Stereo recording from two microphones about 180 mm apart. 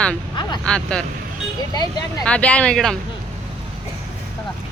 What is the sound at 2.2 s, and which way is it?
Speech, 5° left (ahead or behind).